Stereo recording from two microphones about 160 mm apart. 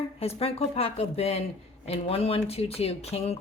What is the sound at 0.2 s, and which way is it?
Speech, 40° left (ahead or behind).